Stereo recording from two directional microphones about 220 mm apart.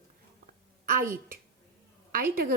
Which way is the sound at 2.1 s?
40° right (ahead or behind).